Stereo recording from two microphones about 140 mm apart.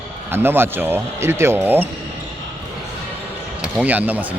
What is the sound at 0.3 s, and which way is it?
Speech, 15° right (ahead or behind).